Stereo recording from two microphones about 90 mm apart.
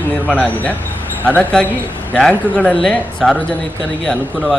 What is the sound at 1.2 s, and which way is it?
Speech, 20° left (ahead or behind).